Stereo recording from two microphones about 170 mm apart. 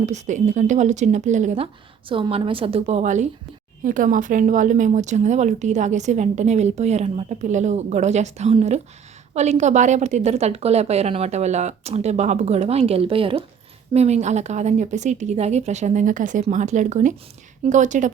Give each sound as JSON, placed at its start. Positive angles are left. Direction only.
{"t": 0.0, "sound": "a woman's voice", "side_deg": -45}